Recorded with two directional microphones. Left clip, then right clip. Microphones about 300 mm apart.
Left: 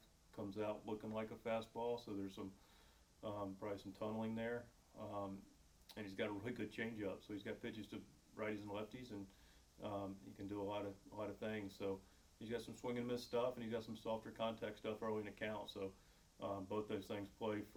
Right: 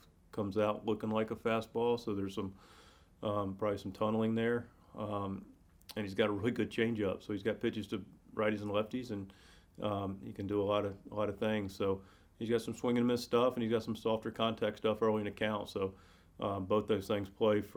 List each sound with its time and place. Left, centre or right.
0.3 s speech: right